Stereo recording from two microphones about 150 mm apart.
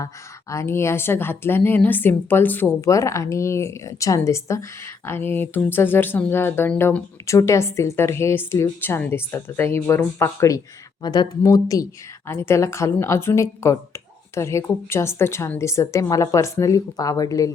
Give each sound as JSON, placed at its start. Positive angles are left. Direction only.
{"t": 0.5, "sound": "a woman's voice", "side_deg": 15}